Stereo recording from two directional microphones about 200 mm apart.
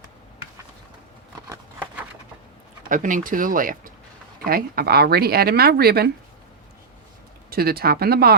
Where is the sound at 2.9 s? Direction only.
40° right (ahead or behind).